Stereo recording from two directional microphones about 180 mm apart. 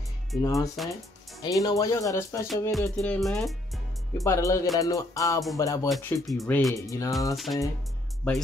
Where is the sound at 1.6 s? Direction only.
20° left (ahead or behind).